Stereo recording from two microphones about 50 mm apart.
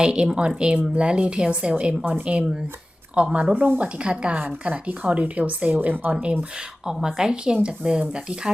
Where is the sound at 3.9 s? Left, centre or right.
Right.